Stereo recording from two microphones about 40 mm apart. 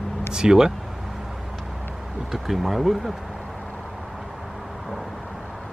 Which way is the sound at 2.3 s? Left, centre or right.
Centre.